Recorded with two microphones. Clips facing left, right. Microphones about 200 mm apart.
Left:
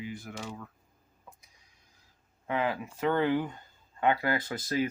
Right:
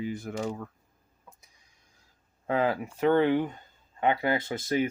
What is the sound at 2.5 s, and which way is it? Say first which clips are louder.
Speech: right 4 dB; 35° right (ahead or behind).